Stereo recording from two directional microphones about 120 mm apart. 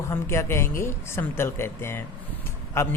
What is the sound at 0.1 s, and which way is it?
Speech, 20° left (ahead or behind).